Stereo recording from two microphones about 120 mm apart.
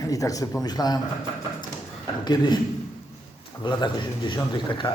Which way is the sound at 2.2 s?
35° left (ahead or behind).